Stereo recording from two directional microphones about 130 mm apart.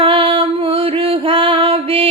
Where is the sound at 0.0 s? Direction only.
45° right (ahead or behind).